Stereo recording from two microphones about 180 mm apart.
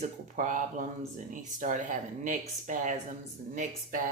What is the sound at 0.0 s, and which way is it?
Speech, 45° right (ahead or behind).